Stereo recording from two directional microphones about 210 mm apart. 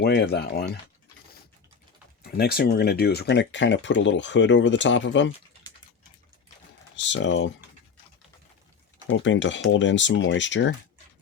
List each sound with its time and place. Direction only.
0.0 s speech: 50° left (ahead or behind)
2.2 s speech: 50° left (ahead or behind)
6.9 s speech: 60° left (ahead or behind)
9.0 s speech: 60° left (ahead or behind)